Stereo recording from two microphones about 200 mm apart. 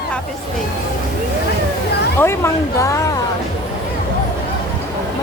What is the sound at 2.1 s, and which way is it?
Speech, 10° left (ahead or behind).